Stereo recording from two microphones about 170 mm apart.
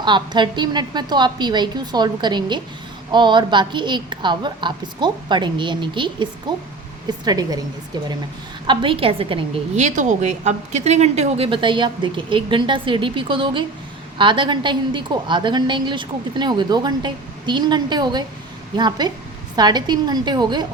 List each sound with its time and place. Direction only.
0.0 s a woman's voice: 25° right (ahead or behind)
8.6 s a woman's voice: 30° right (ahead or behind)